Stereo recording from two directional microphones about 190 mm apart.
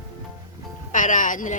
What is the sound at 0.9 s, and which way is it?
Speech, 45° left (ahead or behind).